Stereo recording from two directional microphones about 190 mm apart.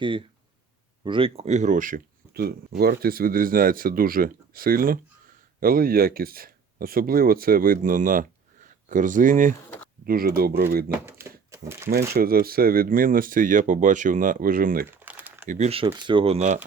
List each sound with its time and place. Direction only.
0.0 s speech: 25° right (ahead or behind); by 10.9 s 50° right (ahead or behind)
11.0 s speech: 15° right (ahead or behind)
11.9 s speech: 50° right (ahead or behind)
14.8 s typing: 10° right (ahead or behind)
15.4 s speech: 35° right (ahead or behind)